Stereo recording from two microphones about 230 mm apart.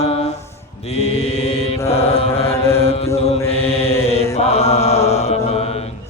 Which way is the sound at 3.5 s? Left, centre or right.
Left.